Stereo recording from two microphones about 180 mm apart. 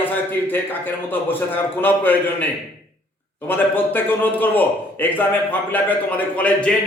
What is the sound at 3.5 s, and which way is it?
A man's voice, 10° left (ahead or behind).